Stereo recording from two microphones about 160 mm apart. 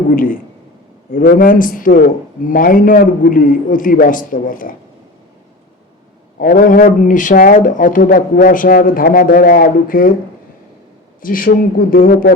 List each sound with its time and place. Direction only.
1.1 s a man's voice: 65° left (ahead or behind)
6.4 s a man's voice: 60° left (ahead or behind)
11.2 s a man's voice: 60° left (ahead or behind)